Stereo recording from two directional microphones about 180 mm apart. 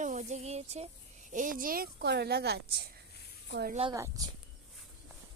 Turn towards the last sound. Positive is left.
turn(degrees=-20)  # may be behind; listen again after turning